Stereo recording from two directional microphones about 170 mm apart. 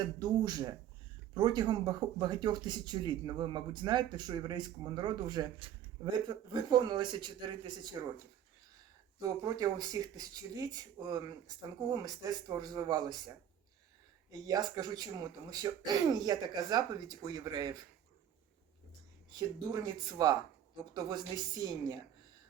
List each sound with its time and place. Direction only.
0.2 s speech: 25° right (ahead or behind)
9.4 s speech: 20° right (ahead or behind)
19.3 s speech: 20° right (ahead or behind)